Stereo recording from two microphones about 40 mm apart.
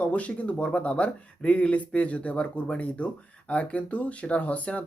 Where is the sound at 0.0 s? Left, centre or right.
Left.